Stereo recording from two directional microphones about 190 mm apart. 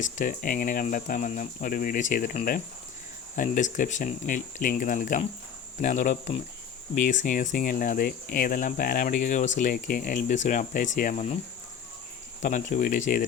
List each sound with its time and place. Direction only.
0.0 s speech: 45° left (ahead or behind)
12.4 s speech: 40° left (ahead or behind)